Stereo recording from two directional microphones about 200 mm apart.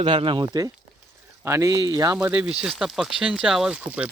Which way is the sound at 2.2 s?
5° right (ahead or behind).